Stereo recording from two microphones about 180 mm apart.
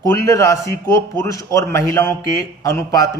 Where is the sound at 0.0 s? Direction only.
15° left (ahead or behind).